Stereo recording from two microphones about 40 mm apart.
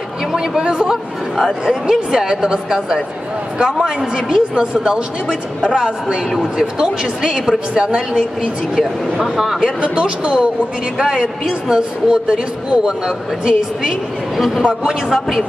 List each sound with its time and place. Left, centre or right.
0.6 s speech: right
1.3 s speech: centre
4.6 s speech: right
9.2 s speech: centre
9.8 s speech: right
11.0 s speech: centre
15.1 s speech: centre